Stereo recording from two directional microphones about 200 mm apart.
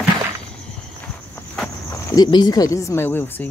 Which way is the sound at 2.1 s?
20° left (ahead or behind).